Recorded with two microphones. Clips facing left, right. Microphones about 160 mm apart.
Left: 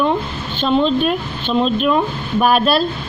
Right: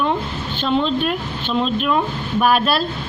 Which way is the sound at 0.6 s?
25° left (ahead or behind).